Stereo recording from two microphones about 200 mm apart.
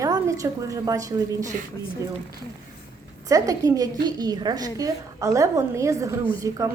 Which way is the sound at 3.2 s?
15° right (ahead or behind).